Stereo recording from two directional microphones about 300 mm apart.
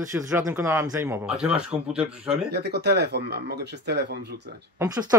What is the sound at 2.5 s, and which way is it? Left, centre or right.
Speech, right.